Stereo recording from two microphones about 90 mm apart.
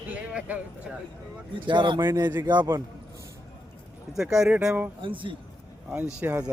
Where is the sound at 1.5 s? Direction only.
60° right (ahead or behind).